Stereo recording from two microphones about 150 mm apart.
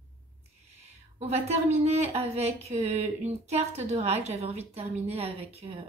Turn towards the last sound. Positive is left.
turn(degrees=-45)  # may be behind; listen again after turning